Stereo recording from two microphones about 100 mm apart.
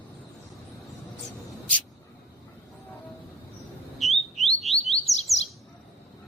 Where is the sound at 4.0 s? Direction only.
Centre (ahead or behind).